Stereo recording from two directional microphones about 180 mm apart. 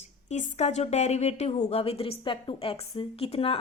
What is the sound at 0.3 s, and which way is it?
Speech, 40° left (ahead or behind).